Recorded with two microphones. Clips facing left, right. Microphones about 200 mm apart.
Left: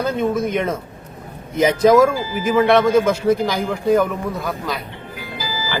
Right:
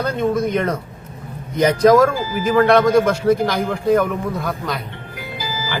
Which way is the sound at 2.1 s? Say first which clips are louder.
Right 1 dB; 45° right (ahead or behind).